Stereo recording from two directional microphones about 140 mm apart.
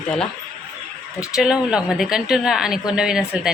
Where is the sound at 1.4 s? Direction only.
5° right (ahead or behind).